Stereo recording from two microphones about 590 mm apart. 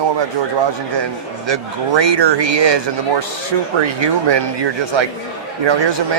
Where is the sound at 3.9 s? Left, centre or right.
Right.